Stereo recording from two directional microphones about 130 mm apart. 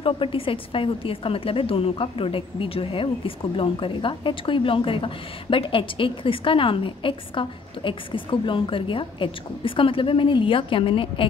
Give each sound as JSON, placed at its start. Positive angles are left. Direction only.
{"t": 0.0, "sound": "a woman's voice", "side_deg": 45}